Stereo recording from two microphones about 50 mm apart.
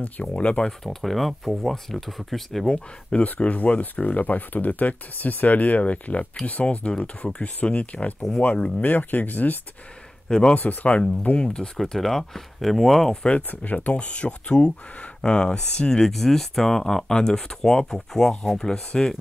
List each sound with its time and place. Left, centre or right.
0.0 s speech: left
0.7 s speech: centre
2.7 s speech: left
10.2 s speech: centre
10.5 s speech: left
11.0 s speech: left; by 13.2 s centre
13.7 s speech: left; by 18.8 s centre